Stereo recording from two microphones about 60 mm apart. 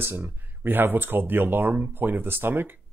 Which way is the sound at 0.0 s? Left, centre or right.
Right.